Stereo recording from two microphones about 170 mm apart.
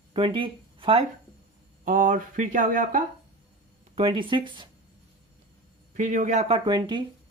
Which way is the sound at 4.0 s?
30° right (ahead or behind).